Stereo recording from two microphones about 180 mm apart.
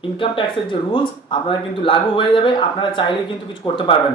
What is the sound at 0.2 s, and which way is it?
Speech, 30° left (ahead or behind).